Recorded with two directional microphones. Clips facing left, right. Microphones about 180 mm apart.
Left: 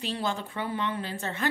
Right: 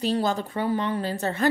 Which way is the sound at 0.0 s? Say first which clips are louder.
Right 7 dB; 40° right (ahead or behind).